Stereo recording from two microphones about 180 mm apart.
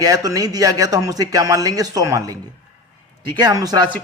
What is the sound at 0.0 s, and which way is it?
A man's voice, 20° right (ahead or behind).